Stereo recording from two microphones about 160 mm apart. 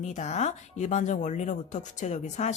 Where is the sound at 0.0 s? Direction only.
50° left (ahead or behind).